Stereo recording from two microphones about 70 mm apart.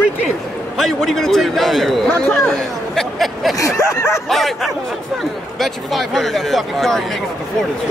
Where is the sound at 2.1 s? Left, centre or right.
Left.